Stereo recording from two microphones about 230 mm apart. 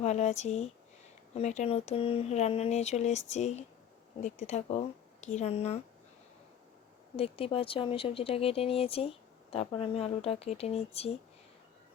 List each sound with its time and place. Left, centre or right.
0.0 s speech: left
7.2 s speech: left